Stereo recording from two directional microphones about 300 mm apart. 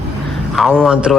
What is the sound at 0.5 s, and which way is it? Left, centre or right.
Speech, centre.